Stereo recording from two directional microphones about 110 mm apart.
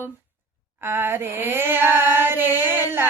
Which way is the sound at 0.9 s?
20° right (ahead or behind).